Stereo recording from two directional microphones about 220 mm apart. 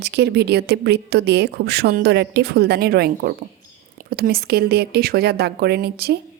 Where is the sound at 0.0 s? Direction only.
50° right (ahead or behind).